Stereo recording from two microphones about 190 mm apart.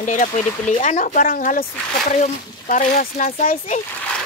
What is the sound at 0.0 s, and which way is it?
Speech, 40° left (ahead or behind).